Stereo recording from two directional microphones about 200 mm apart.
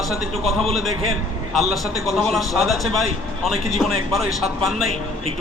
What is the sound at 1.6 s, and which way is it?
A man's voice, centre (ahead or behind).